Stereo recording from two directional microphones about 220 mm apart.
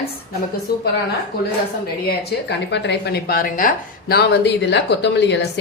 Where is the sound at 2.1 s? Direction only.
50° left (ahead or behind).